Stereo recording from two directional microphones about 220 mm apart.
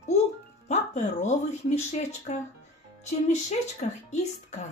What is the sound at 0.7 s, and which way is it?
Speech, 30° left (ahead or behind).